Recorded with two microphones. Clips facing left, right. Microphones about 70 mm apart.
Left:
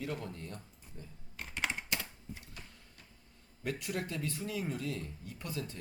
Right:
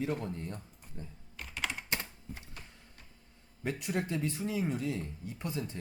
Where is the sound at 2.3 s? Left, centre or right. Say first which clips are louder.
Right 1 dB; right.